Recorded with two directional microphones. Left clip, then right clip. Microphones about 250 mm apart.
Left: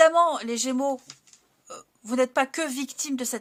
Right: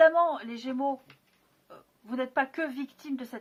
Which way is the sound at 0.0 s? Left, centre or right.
Left.